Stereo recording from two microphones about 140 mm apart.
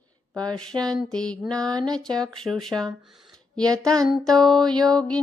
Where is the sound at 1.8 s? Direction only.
5° left (ahead or behind).